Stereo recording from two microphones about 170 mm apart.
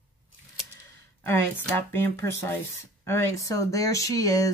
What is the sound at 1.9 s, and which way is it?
Speech, 15° left (ahead or behind).